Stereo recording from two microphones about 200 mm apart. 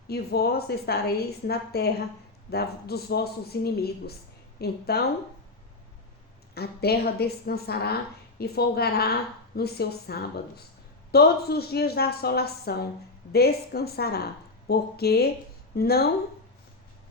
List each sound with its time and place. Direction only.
0.1 s a woman's voice: 50° left (ahead or behind)
6.5 s a woman's voice: 50° left (ahead or behind)